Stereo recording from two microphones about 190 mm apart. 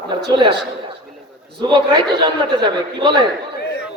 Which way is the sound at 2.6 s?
20° right (ahead or behind).